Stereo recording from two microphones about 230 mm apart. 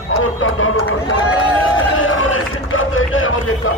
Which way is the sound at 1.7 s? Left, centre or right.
Left.